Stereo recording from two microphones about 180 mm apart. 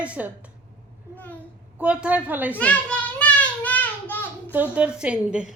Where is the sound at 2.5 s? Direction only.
5° left (ahead or behind).